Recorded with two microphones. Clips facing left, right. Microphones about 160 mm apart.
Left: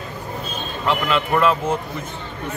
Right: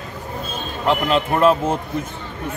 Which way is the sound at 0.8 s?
35° right (ahead or behind).